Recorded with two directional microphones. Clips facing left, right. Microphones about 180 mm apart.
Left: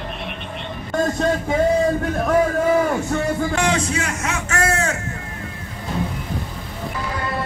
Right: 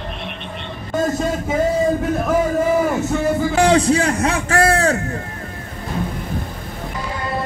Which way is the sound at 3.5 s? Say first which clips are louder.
Right 7 dB; 35° right (ahead or behind).